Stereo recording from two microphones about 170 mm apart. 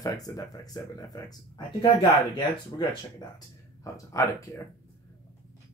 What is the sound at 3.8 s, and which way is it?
Speech, 20° left (ahead or behind).